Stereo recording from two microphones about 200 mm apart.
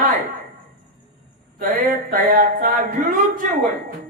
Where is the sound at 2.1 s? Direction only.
45° right (ahead or behind).